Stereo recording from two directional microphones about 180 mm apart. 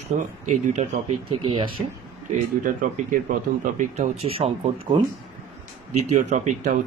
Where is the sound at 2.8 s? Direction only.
50° right (ahead or behind).